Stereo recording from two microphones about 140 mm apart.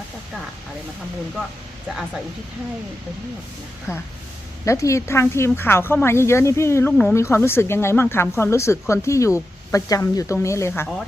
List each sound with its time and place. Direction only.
3.9 s speech: 20° left (ahead or behind)